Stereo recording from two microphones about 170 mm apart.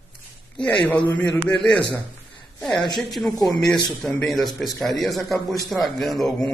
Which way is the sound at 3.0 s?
Centre (ahead or behind).